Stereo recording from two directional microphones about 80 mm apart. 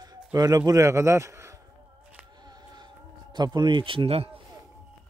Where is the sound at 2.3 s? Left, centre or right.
Right.